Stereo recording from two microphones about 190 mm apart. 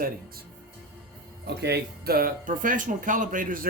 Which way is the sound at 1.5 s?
60° right (ahead or behind).